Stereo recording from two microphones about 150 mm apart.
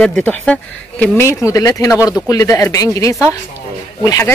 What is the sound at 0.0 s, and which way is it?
Speech, 10° left (ahead or behind).